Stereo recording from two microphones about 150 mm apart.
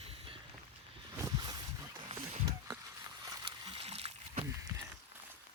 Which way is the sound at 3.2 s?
25° right (ahead or behind).